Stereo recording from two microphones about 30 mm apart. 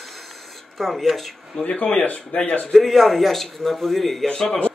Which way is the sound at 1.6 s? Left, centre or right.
Left.